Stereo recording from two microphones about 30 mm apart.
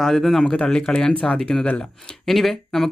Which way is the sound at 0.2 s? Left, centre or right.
Centre.